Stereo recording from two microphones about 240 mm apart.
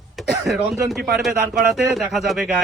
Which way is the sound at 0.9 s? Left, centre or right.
Centre.